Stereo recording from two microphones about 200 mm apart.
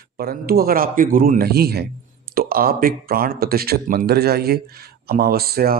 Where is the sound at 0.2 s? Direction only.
50° right (ahead or behind).